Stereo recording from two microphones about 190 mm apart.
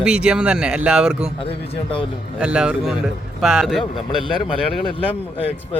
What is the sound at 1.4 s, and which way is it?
Speech, 30° left (ahead or behind).